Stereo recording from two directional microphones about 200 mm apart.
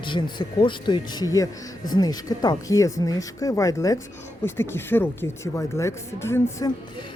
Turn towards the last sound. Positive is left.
turn(degrees=10)  # may be behind; listen again after turning